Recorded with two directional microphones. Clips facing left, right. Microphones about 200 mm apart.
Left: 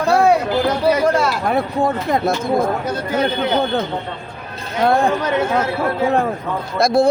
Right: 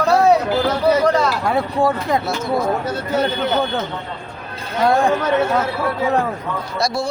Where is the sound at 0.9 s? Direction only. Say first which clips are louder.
Right 1 dB; 10° left (ahead or behind).